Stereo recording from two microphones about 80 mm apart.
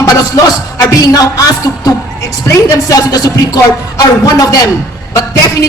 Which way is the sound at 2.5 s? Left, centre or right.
Left.